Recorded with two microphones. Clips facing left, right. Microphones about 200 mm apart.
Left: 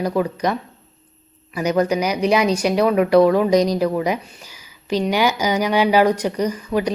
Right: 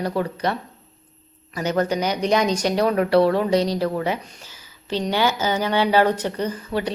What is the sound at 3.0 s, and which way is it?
Speech, 35° right (ahead or behind).